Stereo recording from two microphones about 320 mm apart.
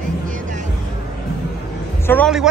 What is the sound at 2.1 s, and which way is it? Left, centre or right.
Speech, centre.